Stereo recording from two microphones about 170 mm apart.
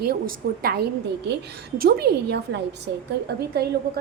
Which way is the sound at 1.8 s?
75° right (ahead or behind).